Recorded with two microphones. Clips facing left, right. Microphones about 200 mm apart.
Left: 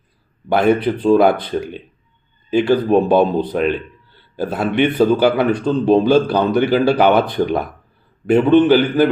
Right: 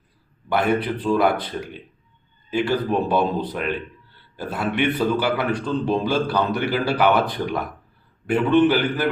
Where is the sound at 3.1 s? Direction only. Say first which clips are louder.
Left 7 dB; 25° left (ahead or behind).